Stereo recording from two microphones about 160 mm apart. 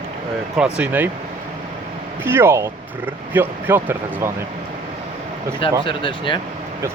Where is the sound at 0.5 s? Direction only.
5° right (ahead or behind).